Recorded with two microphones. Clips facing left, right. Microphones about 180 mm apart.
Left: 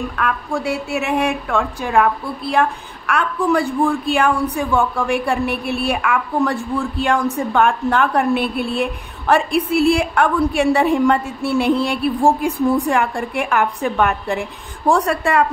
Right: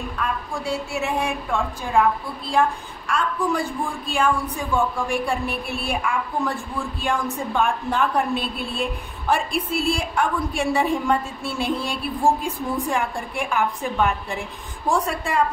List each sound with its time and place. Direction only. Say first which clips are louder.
0.1 s a woman's voice: left 6 dB; 70° left (ahead or behind)